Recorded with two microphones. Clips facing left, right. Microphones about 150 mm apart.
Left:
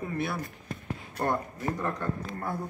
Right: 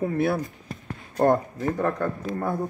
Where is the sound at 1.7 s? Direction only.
50° right (ahead or behind).